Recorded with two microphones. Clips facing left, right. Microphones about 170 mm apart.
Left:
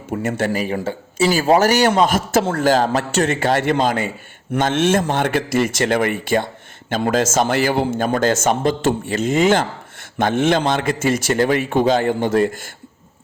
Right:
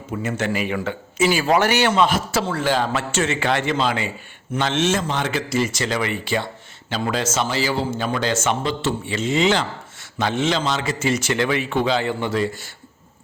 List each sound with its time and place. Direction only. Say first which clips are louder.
0.3 s a man's voice: left 3 dB; 45° left (ahead or behind)